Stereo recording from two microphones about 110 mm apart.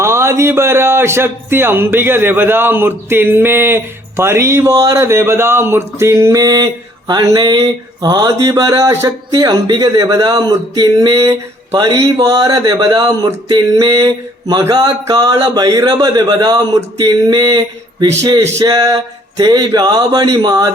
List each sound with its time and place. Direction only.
0.0 s speech: 25° right (ahead or behind)
7.1 s mantra: 35° right (ahead or behind)
18.0 s speech: 30° right (ahead or behind)
18.6 s mantra: 30° right (ahead or behind)